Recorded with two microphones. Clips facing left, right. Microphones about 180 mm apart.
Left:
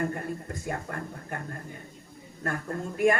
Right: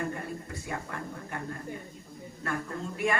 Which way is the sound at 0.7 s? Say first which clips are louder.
Left 3 dB; 45° left (ahead or behind).